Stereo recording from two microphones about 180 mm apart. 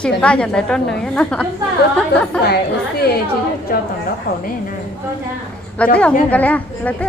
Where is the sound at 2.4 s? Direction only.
60° left (ahead or behind).